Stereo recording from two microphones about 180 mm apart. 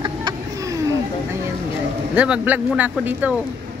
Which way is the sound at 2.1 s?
5° right (ahead or behind).